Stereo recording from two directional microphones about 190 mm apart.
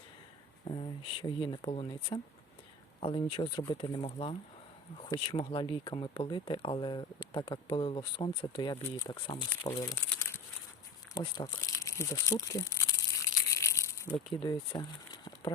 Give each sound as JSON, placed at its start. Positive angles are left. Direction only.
{"t": 0.6, "sound": "speech", "side_deg": 25}
{"t": 9.8, "sound": "crumpling", "side_deg": 15}
{"t": 11.1, "sound": "speech", "side_deg": 20}
{"t": 13.5, "sound": "crumpling", "side_deg": 15}